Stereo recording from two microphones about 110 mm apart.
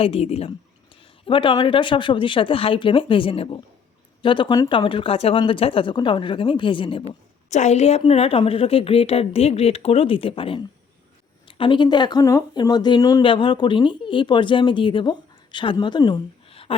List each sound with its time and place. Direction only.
0.0 s a woman's voice: 65° left (ahead or behind)
1.2 s speech: 50° left (ahead or behind)
7.5 s a woman's voice: 90° left; by 13.2 s 35° left (ahead or behind)
13.2 s speech: 50° left (ahead or behind)
16.5 s a sound: 60° left (ahead or behind)